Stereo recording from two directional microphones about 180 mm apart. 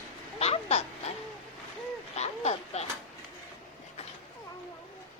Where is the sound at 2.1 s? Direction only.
40° left (ahead or behind).